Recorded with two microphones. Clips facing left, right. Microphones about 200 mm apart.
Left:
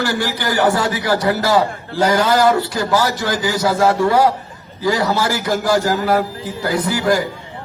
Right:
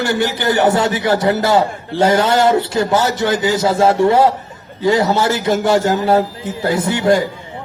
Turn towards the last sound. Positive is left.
turn(degrees=-25)  # may be behind; listen again after turning